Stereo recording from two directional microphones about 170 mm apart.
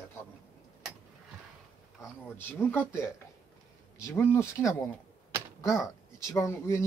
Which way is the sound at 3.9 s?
15° left (ahead or behind).